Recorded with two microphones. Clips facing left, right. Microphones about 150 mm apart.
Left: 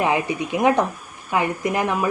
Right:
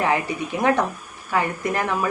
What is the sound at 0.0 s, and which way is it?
Speech, 15° left (ahead or behind).